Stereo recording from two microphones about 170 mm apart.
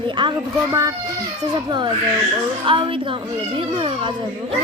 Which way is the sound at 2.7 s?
30° right (ahead or behind).